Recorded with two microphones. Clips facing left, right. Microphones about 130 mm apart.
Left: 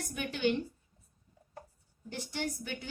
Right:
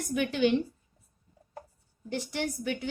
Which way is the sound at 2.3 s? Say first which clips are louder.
Right 4 dB; 90° right.